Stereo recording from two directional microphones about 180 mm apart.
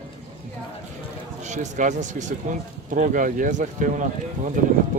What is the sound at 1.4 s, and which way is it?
A man's voice, 40° right (ahead or behind).